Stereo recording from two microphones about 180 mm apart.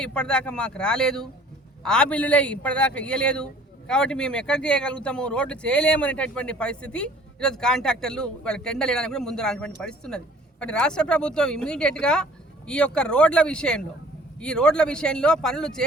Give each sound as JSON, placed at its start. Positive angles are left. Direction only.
{"t": 0.0, "sound": "a man's voice", "side_deg": 5}